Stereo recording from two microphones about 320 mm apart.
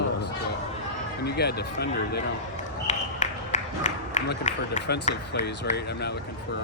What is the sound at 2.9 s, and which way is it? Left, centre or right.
Run, left.